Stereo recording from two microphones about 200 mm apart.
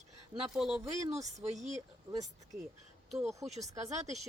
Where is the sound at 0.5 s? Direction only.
5° right (ahead or behind).